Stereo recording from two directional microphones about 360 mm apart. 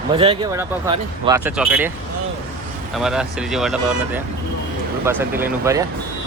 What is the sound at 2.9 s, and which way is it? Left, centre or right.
Speech, centre.